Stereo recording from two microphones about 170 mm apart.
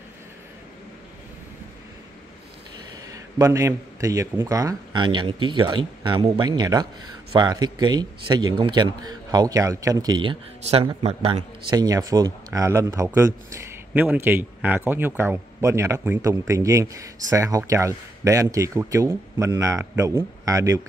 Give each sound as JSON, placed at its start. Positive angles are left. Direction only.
{"t": 3.1, "sound": "a man's voice", "side_deg": -20}
{"t": 10.6, "sound": "a man's voice", "side_deg": -35}
{"t": 11.7, "sound": "a man's voice", "side_deg": -20}